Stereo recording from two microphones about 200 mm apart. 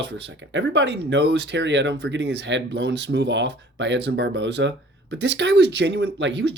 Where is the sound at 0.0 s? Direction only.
60° right (ahead or behind).